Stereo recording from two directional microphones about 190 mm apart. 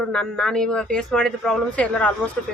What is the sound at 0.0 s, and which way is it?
Speech, 5° left (ahead or behind).